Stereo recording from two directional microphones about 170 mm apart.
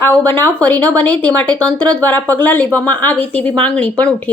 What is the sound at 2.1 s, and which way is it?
Speech, 20° right (ahead or behind).